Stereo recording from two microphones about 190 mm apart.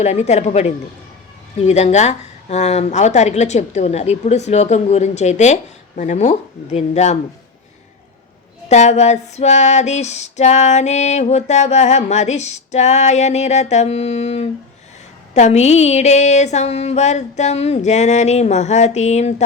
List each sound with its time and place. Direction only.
0.0 s female singing: 35° left (ahead or behind)
8.7 s female singing: 35° left (ahead or behind)